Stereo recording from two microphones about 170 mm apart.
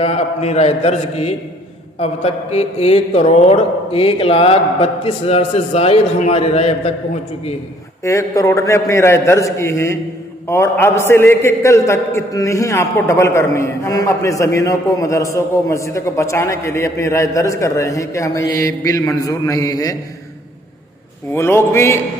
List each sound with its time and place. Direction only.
0.0 s speech: 40° left (ahead or behind)
8.0 s a man's voice: 20° left (ahead or behind)
21.3 s a man's voice: 15° left (ahead or behind)